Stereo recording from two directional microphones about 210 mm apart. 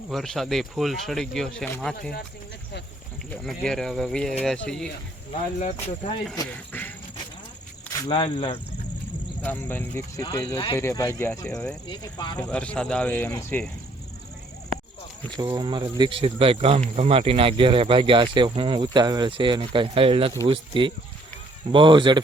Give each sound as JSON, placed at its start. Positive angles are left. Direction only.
{"t": 0.1, "sound": "speech", "side_deg": 0}
{"t": 3.2, "sound": "speech", "side_deg": 5}
{"t": 5.5, "sound": "speech", "side_deg": 35}
{"t": 6.3, "sound": "speech", "side_deg": 10}
{"t": 8.0, "sound": "speech", "side_deg": 25}
{"t": 9.4, "sound": "speech", "side_deg": 10}
{"t": 11.9, "sound": "speech", "side_deg": 20}
{"t": 12.4, "sound": "speech", "side_deg": 5}
{"t": 15.4, "sound": "speech", "side_deg": -20}